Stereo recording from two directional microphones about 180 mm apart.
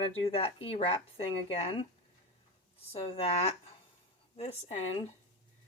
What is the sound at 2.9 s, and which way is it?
Speech, 30° left (ahead or behind).